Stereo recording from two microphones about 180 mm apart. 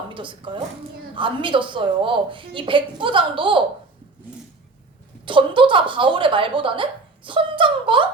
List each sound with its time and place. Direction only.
0.1 s a woman's voice: 25° right (ahead or behind)
5.2 s a woman's voice: 30° right (ahead or behind)